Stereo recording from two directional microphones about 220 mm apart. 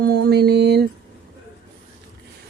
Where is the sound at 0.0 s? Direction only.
45° right (ahead or behind).